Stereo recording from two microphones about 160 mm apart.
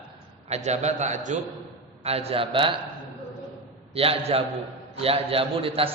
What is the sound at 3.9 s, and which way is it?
A man's voice, 35° right (ahead or behind).